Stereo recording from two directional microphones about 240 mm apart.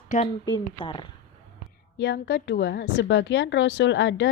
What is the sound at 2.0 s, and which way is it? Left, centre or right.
A woman's voice, left.